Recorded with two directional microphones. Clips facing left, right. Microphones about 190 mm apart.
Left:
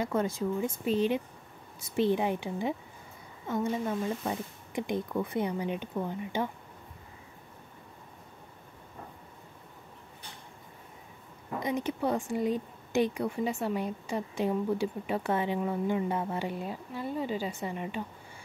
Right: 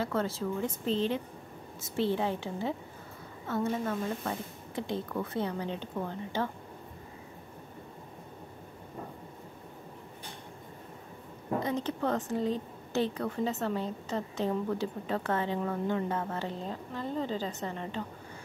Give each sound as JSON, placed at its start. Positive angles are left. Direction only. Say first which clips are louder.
{"t": 0.0, "sound": "a woman's voice", "louder": "left 2 dB", "side_deg": 15}
{"t": 11.6, "sound": "a woman's voice", "louder": "left 3 dB", "side_deg": 10}